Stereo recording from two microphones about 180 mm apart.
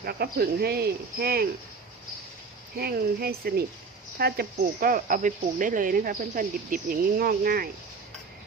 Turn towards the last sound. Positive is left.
turn(degrees=-55)  # may be behind; listen again after turning